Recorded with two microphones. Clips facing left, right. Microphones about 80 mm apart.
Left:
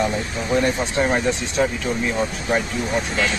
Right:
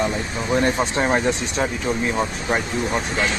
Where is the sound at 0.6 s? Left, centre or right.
Right.